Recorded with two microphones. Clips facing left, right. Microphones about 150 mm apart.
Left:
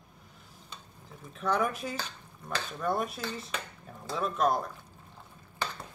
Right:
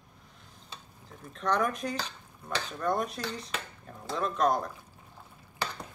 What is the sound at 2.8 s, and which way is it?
Cutlery, 5° left (ahead or behind).